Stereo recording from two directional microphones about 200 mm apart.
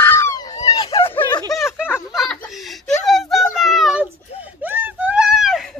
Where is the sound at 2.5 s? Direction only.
Centre (ahead or behind).